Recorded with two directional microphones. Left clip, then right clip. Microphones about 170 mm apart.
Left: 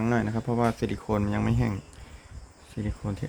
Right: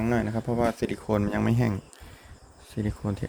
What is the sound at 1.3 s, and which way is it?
Speech, 25° right (ahead or behind).